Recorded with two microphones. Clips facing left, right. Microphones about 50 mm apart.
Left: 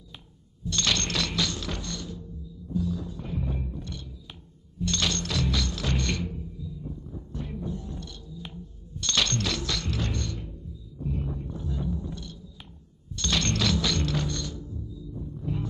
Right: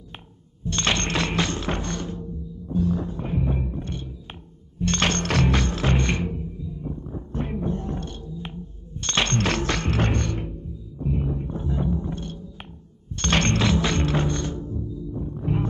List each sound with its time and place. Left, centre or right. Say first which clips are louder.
0.7 s music: right 4 dB; right
11.0 s music: right 6 dB; right